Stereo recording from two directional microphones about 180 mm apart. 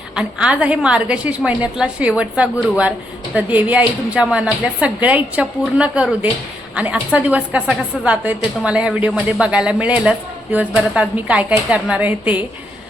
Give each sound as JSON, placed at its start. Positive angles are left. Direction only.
{"t": 0.2, "sound": "a woman's voice", "side_deg": -5}